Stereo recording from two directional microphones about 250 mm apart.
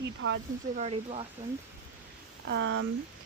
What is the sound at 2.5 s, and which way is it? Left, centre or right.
Speech, right.